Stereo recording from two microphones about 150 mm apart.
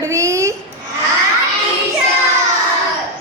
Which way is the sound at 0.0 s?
20° right (ahead or behind).